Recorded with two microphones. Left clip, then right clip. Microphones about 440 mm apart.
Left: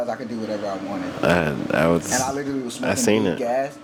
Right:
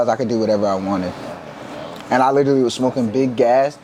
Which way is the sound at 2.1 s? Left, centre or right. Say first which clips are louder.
Right 10 dB; right.